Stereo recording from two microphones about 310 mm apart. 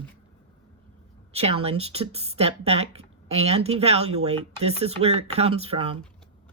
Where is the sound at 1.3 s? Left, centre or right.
Centre.